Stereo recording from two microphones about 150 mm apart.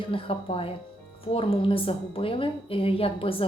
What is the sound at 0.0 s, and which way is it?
A woman's voice, 35° left (ahead or behind).